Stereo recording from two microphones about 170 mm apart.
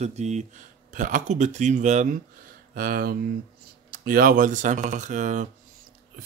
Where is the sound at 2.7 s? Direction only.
60° right (ahead or behind).